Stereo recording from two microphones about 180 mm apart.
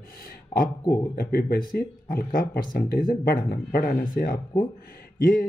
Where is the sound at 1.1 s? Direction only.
55° left (ahead or behind).